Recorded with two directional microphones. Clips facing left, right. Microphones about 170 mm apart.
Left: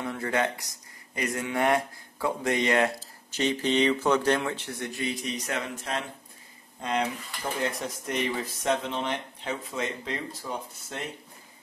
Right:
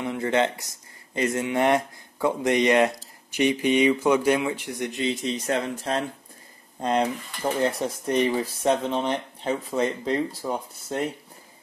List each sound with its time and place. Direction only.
0.0 s speech: 20° right (ahead or behind); by 11.0 s 35° right (ahead or behind)